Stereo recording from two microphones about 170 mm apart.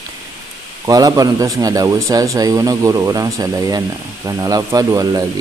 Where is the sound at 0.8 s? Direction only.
20° right (ahead or behind).